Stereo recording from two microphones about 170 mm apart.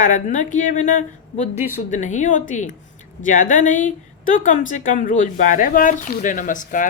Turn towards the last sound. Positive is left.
turn(degrees=50)  # may be behind; listen again after turning